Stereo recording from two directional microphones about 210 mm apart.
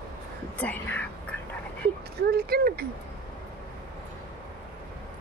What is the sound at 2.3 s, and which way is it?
Speech, 50° right (ahead or behind).